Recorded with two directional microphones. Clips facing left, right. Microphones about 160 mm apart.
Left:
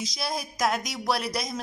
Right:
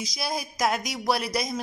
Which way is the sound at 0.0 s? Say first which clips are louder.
Right 1 dB; centre (ahead or behind).